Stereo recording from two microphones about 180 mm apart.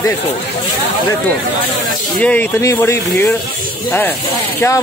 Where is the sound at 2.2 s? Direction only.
10° left (ahead or behind).